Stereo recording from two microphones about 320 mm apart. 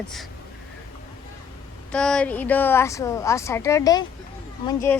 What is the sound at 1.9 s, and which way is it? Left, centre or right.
Speech, centre.